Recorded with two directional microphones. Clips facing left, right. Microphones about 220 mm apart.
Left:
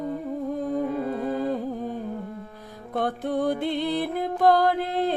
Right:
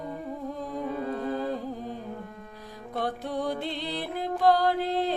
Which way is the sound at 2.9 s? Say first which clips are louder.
Left 5 dB; 50° left (ahead or behind).